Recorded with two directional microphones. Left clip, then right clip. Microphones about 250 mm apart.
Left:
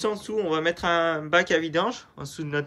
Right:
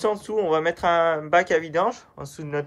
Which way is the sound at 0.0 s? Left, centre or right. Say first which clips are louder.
Right 3 dB; centre.